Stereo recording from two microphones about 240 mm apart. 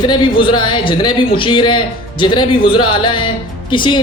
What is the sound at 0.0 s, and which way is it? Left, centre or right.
A woman's voice, centre.